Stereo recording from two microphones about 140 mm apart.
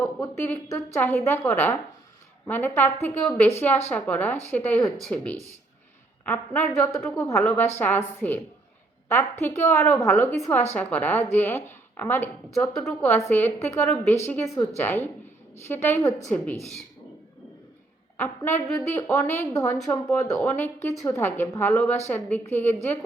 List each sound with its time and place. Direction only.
0.0 s a woman's voice: 15° left (ahead or behind)
12.7 s a woman's voice: centre (ahead or behind)
13.1 s a woman's voice: 15° left (ahead or behind)
18.2 s a woman's voice: 15° left (ahead or behind)